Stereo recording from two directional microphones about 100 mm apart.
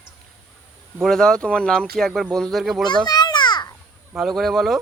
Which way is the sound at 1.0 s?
5° left (ahead or behind).